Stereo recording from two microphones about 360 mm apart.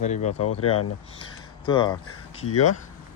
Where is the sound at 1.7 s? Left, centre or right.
Centre.